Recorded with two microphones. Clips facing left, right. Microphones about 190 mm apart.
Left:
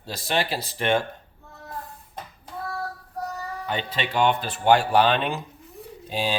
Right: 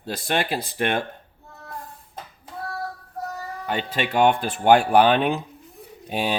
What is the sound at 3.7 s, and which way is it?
Speech, 45° right (ahead or behind).